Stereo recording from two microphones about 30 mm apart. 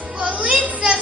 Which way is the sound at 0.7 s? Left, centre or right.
Right.